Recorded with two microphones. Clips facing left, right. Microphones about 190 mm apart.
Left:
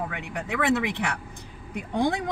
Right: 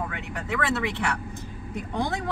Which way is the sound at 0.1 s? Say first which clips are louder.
Even; 15° left (ahead or behind).